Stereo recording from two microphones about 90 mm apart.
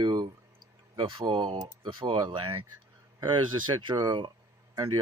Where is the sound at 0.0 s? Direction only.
55° right (ahead or behind).